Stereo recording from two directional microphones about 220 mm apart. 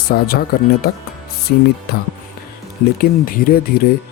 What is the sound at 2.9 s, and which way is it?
Speech, 40° left (ahead or behind).